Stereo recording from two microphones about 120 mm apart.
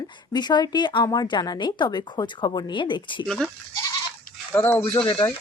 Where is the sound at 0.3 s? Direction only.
35° left (ahead or behind).